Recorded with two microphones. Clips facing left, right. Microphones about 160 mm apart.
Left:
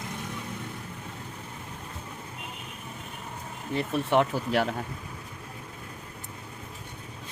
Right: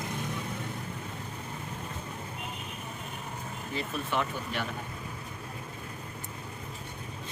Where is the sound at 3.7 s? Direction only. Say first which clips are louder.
Left 8 dB; 65° left (ahead or behind); by 4.6 s 90° left.